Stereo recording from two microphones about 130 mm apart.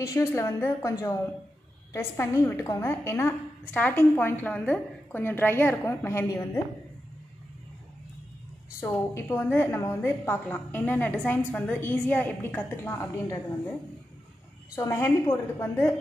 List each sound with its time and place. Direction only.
0.0 s a woman's voice: 25° left (ahead or behind)
9.0 s a woman's voice: 15° left (ahead or behind)
14.8 s a woman's voice: 20° left (ahead or behind)